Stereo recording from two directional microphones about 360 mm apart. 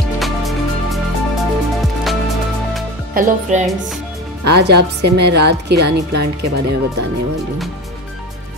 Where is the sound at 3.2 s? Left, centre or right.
Right.